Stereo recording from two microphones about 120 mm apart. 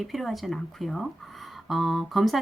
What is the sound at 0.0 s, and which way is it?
Speech, centre (ahead or behind).